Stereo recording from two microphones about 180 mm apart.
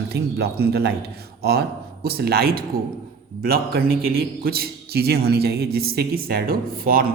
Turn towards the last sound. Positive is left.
turn(degrees=-55)  # may be behind; listen again after turning